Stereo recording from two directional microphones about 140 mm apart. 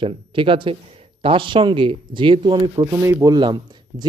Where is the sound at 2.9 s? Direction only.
20° right (ahead or behind).